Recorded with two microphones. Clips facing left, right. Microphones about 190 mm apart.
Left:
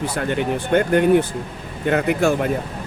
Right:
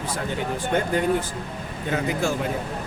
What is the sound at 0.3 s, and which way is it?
Speech, 65° left (ahead or behind).